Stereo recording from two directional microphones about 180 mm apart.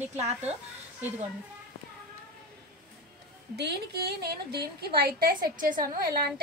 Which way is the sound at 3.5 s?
65° right (ahead or behind).